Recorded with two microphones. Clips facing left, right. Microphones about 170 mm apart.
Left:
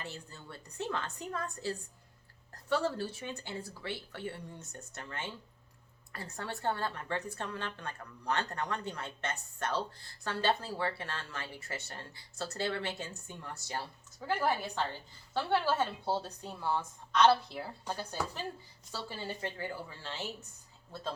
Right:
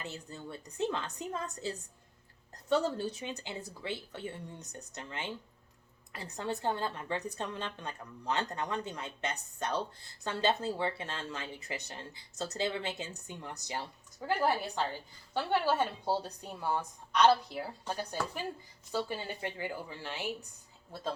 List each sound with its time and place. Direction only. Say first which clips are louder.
0.0 s a woman's voice: right 3 dB; 20° right (ahead or behind)